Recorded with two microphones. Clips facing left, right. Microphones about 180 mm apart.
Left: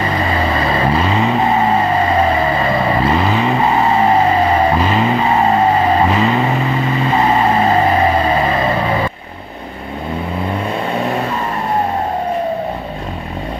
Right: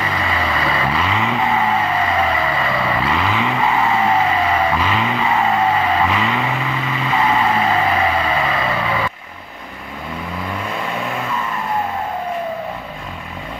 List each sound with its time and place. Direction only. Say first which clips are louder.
0.0 s vehicle: left 5 dB; 35° left (ahead or behind)
10.5 s vehicle: left 5 dB; 30° left (ahead or behind)